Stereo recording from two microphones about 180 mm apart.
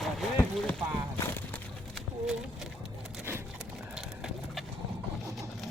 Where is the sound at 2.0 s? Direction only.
Centre (ahead or behind).